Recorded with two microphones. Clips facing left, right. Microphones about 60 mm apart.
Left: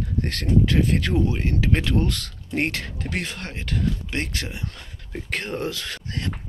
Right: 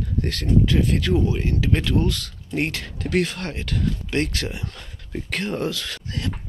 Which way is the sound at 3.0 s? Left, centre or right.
Centre.